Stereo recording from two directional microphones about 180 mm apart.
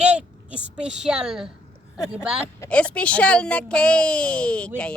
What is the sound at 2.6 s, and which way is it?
Speech, 5° left (ahead or behind).